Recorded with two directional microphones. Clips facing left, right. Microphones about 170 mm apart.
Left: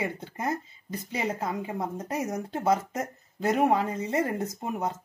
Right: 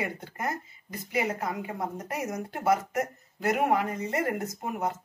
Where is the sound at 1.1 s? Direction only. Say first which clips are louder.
Right 1 dB; 30° left (ahead or behind).